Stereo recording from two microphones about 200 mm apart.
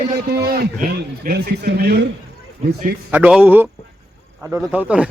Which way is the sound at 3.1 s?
5° right (ahead or behind).